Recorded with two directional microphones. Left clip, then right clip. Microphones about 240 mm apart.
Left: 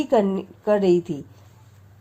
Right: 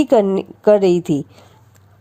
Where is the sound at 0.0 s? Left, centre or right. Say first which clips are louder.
Right 6 dB; right.